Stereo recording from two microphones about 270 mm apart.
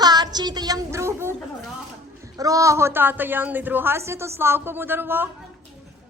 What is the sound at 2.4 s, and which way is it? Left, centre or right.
A woman's voice, centre.